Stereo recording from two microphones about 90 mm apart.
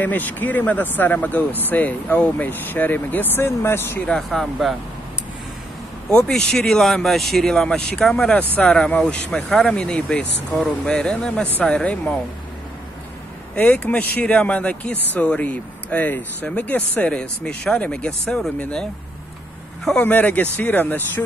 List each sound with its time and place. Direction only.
0.0 s speech: 20° left (ahead or behind)
4.0 s speech: 5° left (ahead or behind)
6.0 s speech: 10° left (ahead or behind)
13.6 s speech: 15° left (ahead or behind)
20.0 s speech: 20° left (ahead or behind)